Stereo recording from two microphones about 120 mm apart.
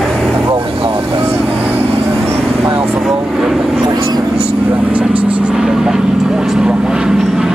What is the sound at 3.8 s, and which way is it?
Speech, 35° right (ahead or behind).